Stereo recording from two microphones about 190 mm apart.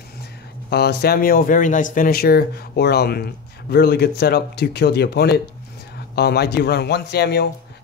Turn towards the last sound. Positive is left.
turn(degrees=60)  # may be behind; listen again after turning